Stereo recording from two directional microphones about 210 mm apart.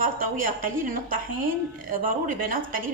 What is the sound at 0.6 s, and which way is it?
Speech, 40° right (ahead or behind).